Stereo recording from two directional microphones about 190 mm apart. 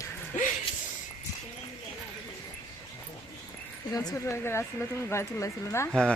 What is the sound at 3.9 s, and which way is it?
Speech, 15° left (ahead or behind).